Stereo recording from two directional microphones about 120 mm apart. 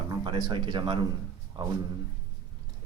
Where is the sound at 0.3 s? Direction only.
35° right (ahead or behind).